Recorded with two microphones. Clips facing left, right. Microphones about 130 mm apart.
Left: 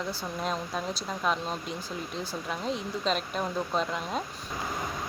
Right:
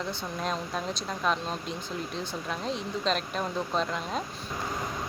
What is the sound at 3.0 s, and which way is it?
Speech, 5° left (ahead or behind).